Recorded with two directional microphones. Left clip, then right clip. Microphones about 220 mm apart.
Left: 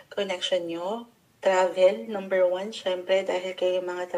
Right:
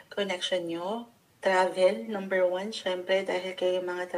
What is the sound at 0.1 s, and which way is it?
A woman's voice, 35° right (ahead or behind).